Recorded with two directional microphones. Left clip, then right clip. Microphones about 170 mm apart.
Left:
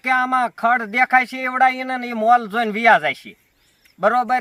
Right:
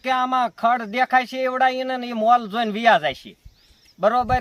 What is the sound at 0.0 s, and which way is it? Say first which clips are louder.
Speech: left 2 dB; 10° right (ahead or behind).